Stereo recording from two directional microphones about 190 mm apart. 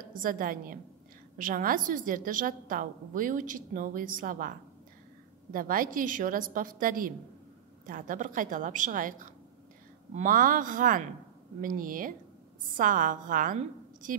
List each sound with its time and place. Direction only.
0.1 s a woman's voice: 45° right (ahead or behind)